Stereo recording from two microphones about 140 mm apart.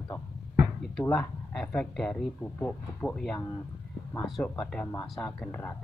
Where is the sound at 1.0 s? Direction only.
10° left (ahead or behind).